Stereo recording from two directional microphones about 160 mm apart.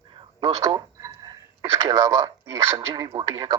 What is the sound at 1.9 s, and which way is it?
Speech, 20° right (ahead or behind).